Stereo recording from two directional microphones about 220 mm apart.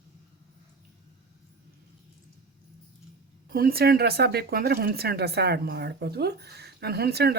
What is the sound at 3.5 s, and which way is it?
Speech, 40° right (ahead or behind).